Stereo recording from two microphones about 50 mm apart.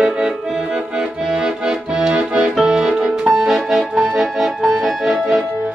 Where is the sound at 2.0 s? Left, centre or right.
Centre.